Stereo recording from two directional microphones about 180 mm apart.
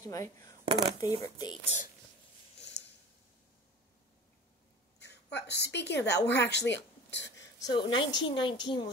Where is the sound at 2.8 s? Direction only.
65° left (ahead or behind).